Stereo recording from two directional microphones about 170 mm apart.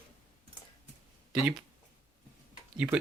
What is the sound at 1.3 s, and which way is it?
Speech, 5° right (ahead or behind).